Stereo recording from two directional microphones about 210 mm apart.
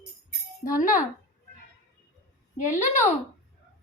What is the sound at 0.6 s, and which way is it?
Speech, 40° left (ahead or behind).